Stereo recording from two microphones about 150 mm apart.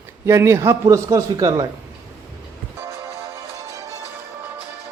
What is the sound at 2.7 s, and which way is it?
Music, 15° right (ahead or behind).